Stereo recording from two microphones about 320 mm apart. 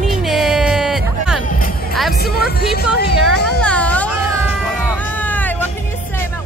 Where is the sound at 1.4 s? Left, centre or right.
Left.